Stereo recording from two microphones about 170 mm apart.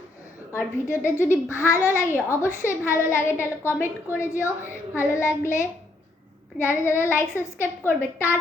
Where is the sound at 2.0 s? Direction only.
15° left (ahead or behind).